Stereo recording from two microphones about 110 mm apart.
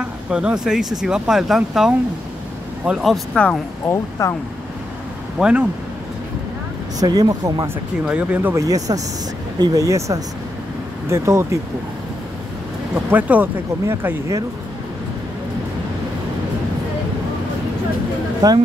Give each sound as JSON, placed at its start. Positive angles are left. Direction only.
{"t": 0.0, "sound": "speech", "side_deg": -10}
{"t": 3.0, "sound": "speech", "side_deg": 5}
{"t": 3.9, "sound": "speech", "side_deg": 25}
{"t": 5.4, "sound": "speech", "side_deg": -10}
{"t": 7.0, "sound": "speech", "side_deg": -35}
{"t": 8.0, "sound": "speech", "side_deg": -10}
{"t": 8.6, "sound": "speech", "side_deg": -35}
{"t": 12.9, "sound": "speech", "side_deg": -15}
{"t": 18.4, "sound": "speech", "side_deg": -35}